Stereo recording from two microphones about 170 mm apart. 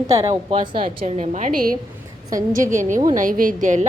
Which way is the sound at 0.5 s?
30° right (ahead or behind).